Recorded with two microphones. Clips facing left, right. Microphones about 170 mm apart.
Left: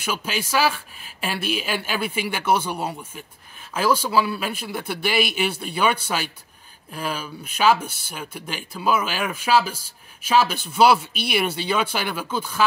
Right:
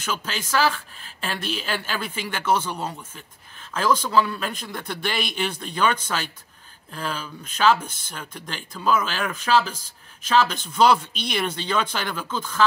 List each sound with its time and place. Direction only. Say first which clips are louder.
0.0 s speech: left 3 dB; 10° left (ahead or behind)